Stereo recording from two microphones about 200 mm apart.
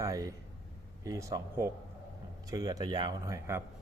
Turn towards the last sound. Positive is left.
turn(degrees=-15)  # may be behind; listen again after turning